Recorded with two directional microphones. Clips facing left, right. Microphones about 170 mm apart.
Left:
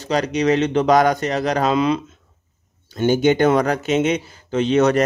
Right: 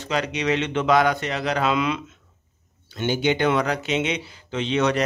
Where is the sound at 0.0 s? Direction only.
40° left (ahead or behind).